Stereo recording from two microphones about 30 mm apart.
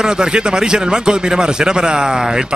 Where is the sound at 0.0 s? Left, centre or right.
Right.